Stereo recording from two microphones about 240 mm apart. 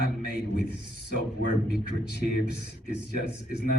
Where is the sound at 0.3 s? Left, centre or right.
Left.